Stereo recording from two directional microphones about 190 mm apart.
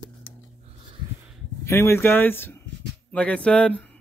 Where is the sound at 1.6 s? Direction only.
15° left (ahead or behind).